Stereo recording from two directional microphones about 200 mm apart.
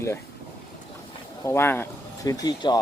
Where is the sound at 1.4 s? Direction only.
10° left (ahead or behind).